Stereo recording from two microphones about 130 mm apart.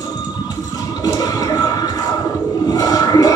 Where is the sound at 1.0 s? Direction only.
30° left (ahead or behind).